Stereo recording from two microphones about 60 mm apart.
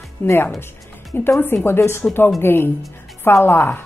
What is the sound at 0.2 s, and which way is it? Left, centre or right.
Speech, left.